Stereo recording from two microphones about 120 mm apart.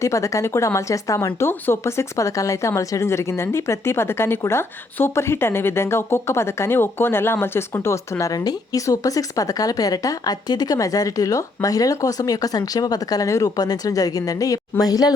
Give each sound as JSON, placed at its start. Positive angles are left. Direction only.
{"t": 0.0, "sound": "a woman's voice", "side_deg": 25}